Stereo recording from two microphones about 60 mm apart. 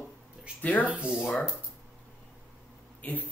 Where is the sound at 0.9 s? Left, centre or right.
Right.